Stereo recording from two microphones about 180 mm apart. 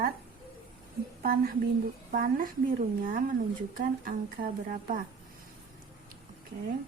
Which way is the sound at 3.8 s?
50° right (ahead or behind).